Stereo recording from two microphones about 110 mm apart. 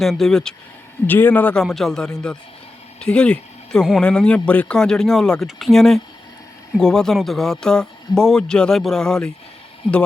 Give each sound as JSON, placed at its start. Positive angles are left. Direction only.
{"t": 0.0, "sound": "speech", "side_deg": 0}
{"t": 1.0, "sound": "a man's voice", "side_deg": 15}
{"t": 1.6, "sound": "speech", "side_deg": 0}